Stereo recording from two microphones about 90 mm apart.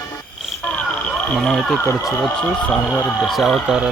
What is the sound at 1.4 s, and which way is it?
Speech, 5° left (ahead or behind).